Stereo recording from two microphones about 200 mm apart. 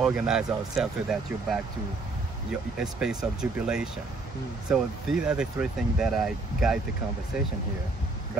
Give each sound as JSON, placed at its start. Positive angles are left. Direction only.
{"t": 0.0, "sound": "speech", "side_deg": -5}